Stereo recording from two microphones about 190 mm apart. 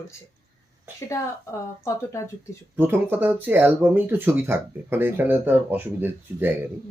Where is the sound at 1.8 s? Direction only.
15° left (ahead or behind).